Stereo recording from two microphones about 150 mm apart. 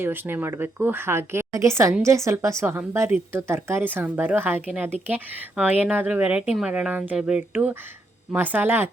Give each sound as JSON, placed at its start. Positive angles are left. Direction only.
{"t": 0.0, "sound": "a woman's voice", "side_deg": -15}